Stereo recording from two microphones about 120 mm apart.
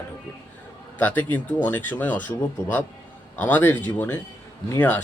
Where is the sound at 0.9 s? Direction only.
15° left (ahead or behind).